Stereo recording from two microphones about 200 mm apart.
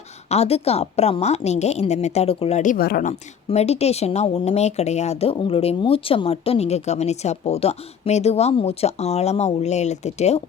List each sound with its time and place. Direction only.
0.3 s speech: 30° left (ahead or behind); by 3.1 s 50° left (ahead or behind)
3.1 s speech: 35° left (ahead or behind)